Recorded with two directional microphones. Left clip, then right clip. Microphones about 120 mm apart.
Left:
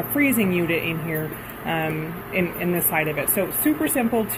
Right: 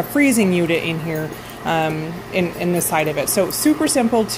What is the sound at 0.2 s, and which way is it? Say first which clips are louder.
Speech: right 4 dB; 45° right (ahead or behind).